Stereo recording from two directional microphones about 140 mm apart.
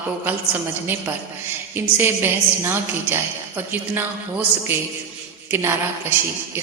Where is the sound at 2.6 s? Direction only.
15° right (ahead or behind).